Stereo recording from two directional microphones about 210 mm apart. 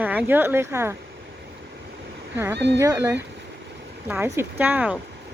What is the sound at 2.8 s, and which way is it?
Speech, 15° right (ahead or behind).